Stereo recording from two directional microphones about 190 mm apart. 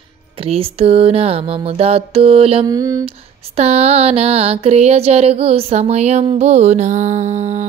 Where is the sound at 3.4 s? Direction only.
35° right (ahead or behind).